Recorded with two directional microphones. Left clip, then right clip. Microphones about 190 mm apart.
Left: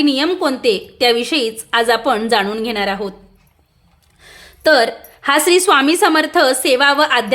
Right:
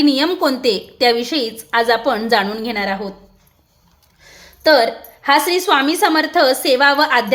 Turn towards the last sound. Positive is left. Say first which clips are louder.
# even
turn(degrees=15)  # may be behind; listen again after turning